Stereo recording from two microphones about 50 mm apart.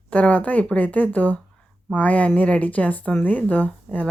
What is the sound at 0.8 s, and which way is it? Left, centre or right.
Speech, left.